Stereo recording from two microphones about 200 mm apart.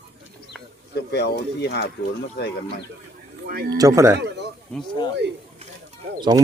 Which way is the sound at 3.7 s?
15° right (ahead or behind).